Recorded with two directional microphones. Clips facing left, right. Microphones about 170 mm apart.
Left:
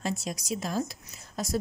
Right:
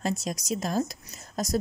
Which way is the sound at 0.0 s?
40° right (ahead or behind).